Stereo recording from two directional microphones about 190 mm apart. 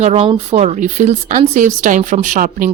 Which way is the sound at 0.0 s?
30° right (ahead or behind).